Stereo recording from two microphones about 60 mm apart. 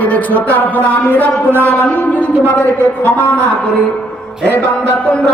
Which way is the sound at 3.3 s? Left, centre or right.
Left.